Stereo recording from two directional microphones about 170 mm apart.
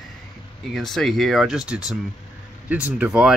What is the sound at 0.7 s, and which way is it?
Speech, centre (ahead or behind).